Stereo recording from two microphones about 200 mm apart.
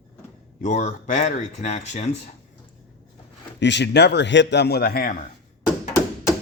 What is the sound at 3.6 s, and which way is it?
A man's voice, 60° left (ahead or behind).